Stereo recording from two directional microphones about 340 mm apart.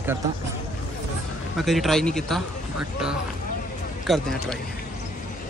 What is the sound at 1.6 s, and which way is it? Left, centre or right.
A man's voice, centre.